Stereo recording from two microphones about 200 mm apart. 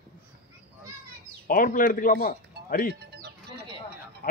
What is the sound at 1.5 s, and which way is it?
Speech, 45° left (ahead or behind).